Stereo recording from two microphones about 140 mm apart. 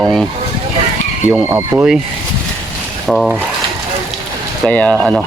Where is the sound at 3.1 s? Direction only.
Centre (ahead or behind).